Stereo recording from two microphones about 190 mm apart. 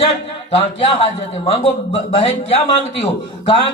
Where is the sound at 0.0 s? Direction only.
30° left (ahead or behind).